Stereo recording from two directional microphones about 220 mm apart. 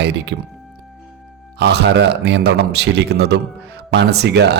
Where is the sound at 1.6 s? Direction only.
50° right (ahead or behind).